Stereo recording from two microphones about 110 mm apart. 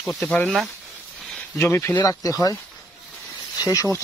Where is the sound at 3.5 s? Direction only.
30° left (ahead or behind).